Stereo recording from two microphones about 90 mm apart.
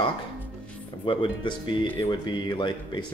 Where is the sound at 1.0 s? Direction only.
65° left (ahead or behind).